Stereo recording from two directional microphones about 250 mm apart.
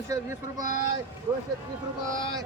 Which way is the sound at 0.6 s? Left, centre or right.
Left.